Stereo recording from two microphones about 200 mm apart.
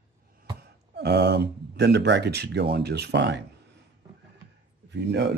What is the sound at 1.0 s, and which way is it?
Speech, 55° right (ahead or behind).